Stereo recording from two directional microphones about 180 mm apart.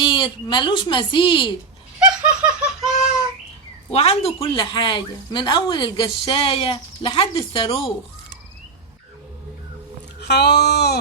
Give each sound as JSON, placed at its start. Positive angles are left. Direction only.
{"t": 0.0, "sound": "speech", "side_deg": 25}
{"t": 2.0, "sound": "snicker", "side_deg": -5}
{"t": 3.9, "sound": "speech", "side_deg": 35}
{"t": 10.2, "sound": "speech", "side_deg": 70}